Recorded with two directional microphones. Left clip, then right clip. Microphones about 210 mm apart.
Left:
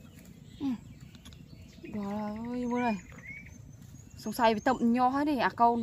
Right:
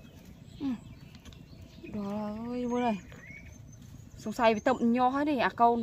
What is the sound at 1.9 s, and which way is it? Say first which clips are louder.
Bird: even; 10° left (ahead or behind).